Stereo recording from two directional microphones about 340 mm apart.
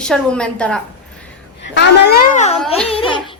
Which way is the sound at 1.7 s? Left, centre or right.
Left.